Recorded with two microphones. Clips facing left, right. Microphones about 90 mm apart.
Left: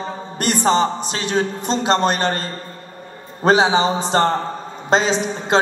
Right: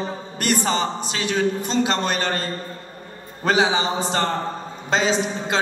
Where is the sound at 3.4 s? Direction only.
30° left (ahead or behind).